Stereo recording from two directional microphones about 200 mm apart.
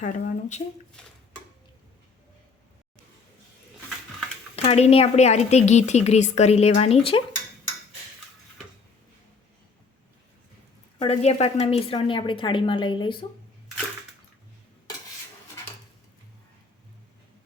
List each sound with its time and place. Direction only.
0.0 s a woman's voice: 40° left (ahead or behind)
1.0 s dishes: 5° left (ahead or behind)
4.5 s a woman's voice: 30° left (ahead or behind)
11.0 s a woman's voice: 35° left (ahead or behind)